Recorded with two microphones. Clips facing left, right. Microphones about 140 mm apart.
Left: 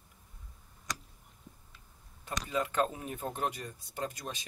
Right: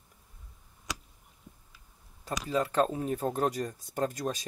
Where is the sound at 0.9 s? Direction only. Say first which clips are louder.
Right 1 dB; centre (ahead or behind).